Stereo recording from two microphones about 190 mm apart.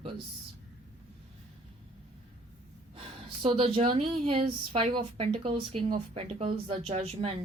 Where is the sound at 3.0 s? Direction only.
30° right (ahead or behind).